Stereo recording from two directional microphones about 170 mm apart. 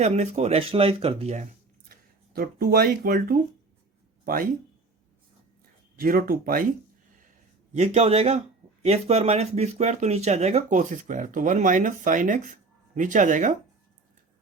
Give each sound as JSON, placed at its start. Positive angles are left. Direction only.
{"t": 0.0, "sound": "speech", "side_deg": -40}
{"t": 1.9, "sound": "speech", "side_deg": -60}
{"t": 6.0, "sound": "speech", "side_deg": -60}
{"t": 7.7, "sound": "speech", "side_deg": -40}